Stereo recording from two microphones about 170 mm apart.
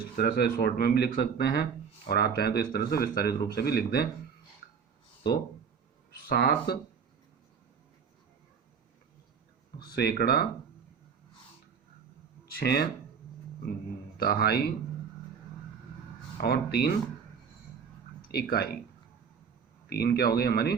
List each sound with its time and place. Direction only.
0.2 s speech: 65° left (ahead or behind)
6.1 s speech: 65° left (ahead or behind)
9.9 s speech: 70° left (ahead or behind)
12.5 s speech: 65° left (ahead or behind)
14.2 s speech: 65° left (ahead or behind)
16.4 s speech: 65° left (ahead or behind)
18.3 s speech: 70° left (ahead or behind)
19.9 s speech: 65° left (ahead or behind)